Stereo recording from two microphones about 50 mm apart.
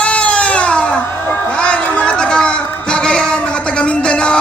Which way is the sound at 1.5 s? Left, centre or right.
Left.